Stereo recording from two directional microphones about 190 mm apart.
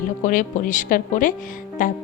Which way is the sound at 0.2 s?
45° left (ahead or behind).